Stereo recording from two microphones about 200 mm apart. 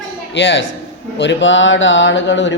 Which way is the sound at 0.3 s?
65° left (ahead or behind).